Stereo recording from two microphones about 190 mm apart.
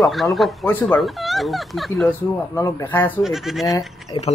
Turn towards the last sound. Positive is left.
turn(degrees=20)  # may be behind; listen again after turning